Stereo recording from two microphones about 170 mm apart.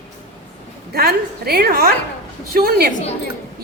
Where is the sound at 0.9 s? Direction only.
65° right (ahead or behind).